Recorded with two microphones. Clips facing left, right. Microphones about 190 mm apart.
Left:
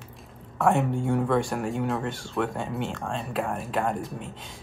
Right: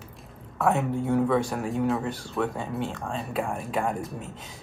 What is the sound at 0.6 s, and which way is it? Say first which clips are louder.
Speech: left 1 dB; centre (ahead or behind).